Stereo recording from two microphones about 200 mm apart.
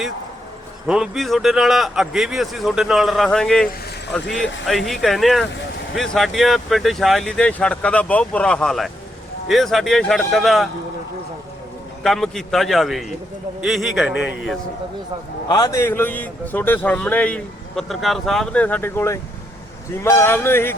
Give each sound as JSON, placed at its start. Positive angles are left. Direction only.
{"t": 0.9, "sound": "speech", "side_deg": 0}
{"t": 12.0, "sound": "speech", "side_deg": 0}
{"t": 15.4, "sound": "a man's voice", "side_deg": 20}